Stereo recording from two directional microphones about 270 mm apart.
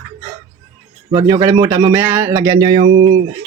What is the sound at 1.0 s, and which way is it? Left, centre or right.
Speech, centre.